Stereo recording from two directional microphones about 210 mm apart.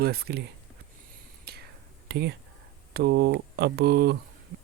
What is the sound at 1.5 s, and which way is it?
Whispering, 50° right (ahead or behind).